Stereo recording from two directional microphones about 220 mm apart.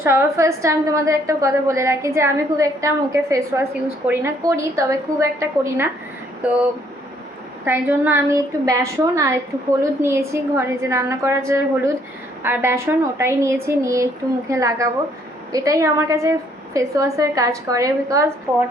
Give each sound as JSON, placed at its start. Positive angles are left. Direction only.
{"t": 0.0, "sound": "a woman's voice", "side_deg": -10}